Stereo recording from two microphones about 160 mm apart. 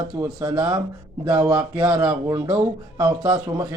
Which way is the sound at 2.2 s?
25° right (ahead or behind).